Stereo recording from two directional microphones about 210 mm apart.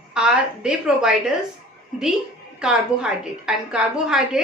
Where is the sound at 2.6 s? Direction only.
5° right (ahead or behind).